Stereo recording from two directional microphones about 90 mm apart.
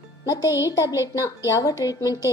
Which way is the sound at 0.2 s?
45° left (ahead or behind).